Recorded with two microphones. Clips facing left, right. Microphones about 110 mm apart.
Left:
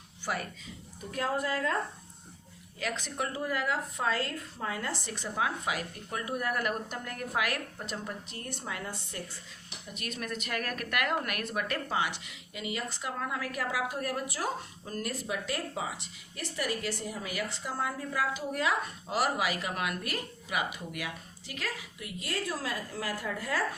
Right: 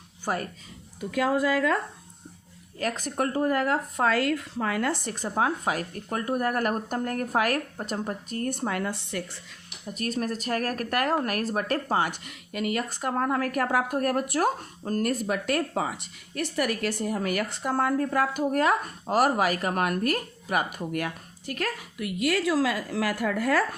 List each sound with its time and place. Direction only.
0.3 s speech: 40° right (ahead or behind)
1.1 s a woman's voice: 90° right
2.7 s a woman's voice: 45° right (ahead or behind); by 9.4 s 75° right (ahead or behind)
9.8 s a woman's voice: 40° right (ahead or behind); by 23.6 s 65° right (ahead or behind)